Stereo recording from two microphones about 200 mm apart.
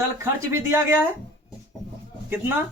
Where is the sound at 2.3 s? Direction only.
10° right (ahead or behind).